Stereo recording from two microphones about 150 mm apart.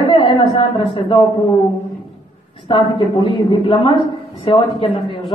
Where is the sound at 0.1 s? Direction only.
30° left (ahead or behind).